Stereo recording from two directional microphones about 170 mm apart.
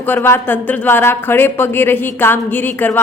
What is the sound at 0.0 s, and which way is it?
Speech, 10° left (ahead or behind).